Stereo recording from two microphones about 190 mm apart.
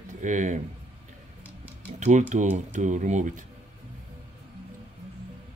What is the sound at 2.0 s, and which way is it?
Speech, 40° right (ahead or behind).